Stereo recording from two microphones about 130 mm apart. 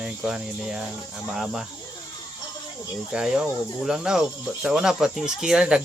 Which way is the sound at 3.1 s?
5° right (ahead or behind).